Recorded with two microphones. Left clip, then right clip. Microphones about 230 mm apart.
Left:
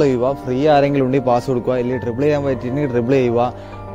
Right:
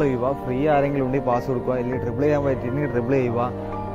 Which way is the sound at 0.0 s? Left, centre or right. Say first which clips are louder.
Left 6 dB; left.